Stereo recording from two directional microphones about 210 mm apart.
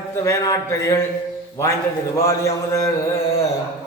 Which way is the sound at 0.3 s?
15° left (ahead or behind).